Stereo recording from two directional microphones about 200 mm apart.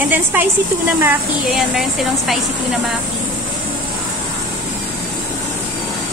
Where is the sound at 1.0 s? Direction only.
Centre (ahead or behind).